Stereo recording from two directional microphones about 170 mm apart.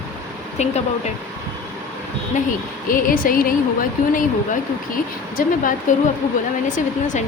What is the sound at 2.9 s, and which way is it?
Speech, 55° left (ahead or behind).